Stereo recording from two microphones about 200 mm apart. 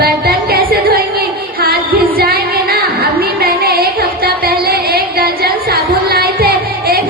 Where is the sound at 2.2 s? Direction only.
50° right (ahead or behind).